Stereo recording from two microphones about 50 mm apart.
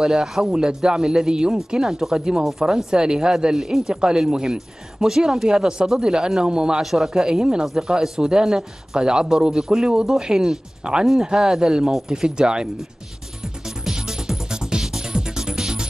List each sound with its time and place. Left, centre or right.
0.0 s speech: centre
6.8 s speech: centre
13.4 s music: centre